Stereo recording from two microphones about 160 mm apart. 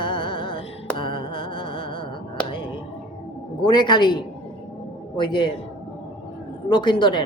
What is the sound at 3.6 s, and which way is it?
A man's voice, 30° left (ahead or behind).